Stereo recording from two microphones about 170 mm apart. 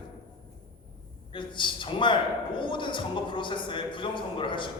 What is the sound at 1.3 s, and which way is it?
A man's voice, 30° left (ahead or behind).